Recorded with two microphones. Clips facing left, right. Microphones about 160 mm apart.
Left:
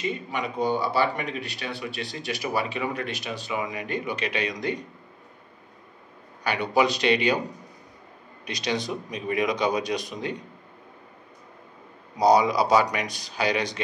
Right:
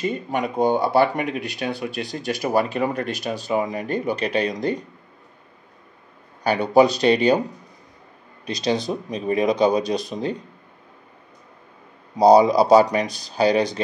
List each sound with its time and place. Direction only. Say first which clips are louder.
0.0 s speech: right 5 dB; 50° right (ahead or behind)
6.4 s speech: right 7 dB; 35° right (ahead or behind)
8.5 s speech: right 5 dB; 30° right (ahead or behind)
12.2 s speech: right 6 dB; 30° right (ahead or behind)